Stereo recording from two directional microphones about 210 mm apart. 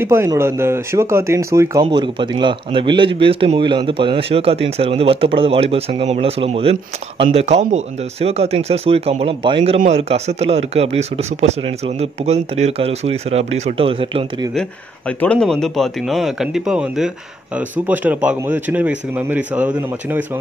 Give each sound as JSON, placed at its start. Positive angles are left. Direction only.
{"t": 0.0, "sound": "speech", "side_deg": -10}
{"t": 14.5, "sound": "speech", "side_deg": 5}